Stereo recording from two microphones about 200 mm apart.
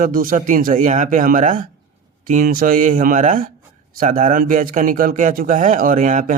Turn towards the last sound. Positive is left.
turn(degrees=-40)  # may be behind; listen again after turning